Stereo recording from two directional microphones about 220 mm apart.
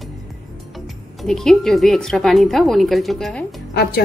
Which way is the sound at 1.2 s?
Centre (ahead or behind).